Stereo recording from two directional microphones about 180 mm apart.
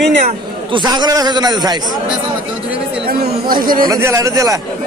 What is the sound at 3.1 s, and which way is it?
Chatter, 55° right (ahead or behind).